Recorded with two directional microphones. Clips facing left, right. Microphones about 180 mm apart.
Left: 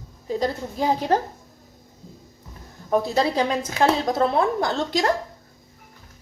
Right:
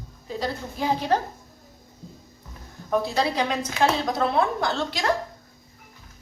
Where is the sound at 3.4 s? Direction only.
45° left (ahead or behind).